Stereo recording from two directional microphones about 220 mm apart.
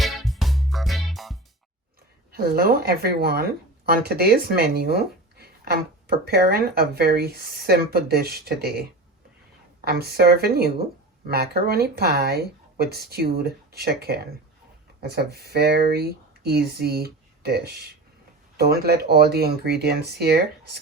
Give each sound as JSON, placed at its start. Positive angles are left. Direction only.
{"t": 0.0, "sound": "music", "side_deg": 0}
{"t": 2.3, "sound": "speech", "side_deg": -45}